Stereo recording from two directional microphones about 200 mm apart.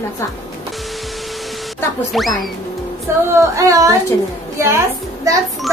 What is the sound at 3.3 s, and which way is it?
A woman's voice, 15° right (ahead or behind).